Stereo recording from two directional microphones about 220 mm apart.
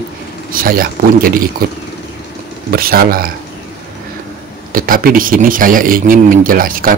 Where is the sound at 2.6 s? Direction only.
40° right (ahead or behind).